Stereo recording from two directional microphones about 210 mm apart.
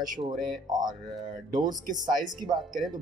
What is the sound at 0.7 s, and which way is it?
A man's voice, 20° right (ahead or behind).